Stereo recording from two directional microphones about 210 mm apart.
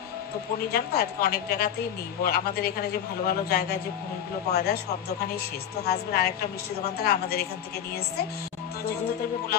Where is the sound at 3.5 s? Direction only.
50° left (ahead or behind).